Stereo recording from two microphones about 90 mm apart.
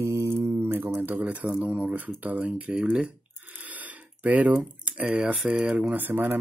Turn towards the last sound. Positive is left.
turn(degrees=-20)  # may be behind; listen again after turning